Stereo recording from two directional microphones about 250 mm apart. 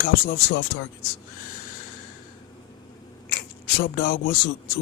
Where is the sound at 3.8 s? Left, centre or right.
Left.